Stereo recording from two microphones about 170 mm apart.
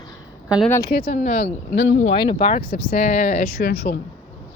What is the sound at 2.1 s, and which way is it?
Speech, 30° left (ahead or behind).